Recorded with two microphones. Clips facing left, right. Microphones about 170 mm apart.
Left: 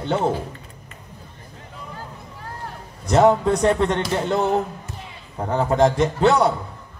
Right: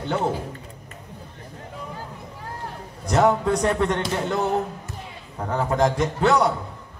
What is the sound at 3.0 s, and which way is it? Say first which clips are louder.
Mantra: left 3 dB; 25° left (ahead or behind).